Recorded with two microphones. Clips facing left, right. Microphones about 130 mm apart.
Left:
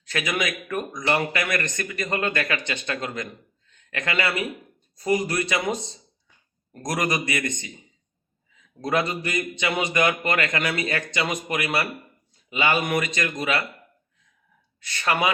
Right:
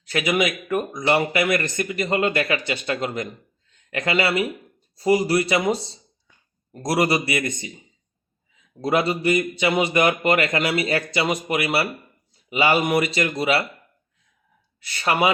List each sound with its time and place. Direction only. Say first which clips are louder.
0.1 s speech: right 5 dB; 30° right (ahead or behind)
6.8 s speech: right 5 dB; 30° right (ahead or behind)
8.8 s speech: right 4 dB; 30° right (ahead or behind)
14.8 s speech: right 3 dB; 25° right (ahead or behind)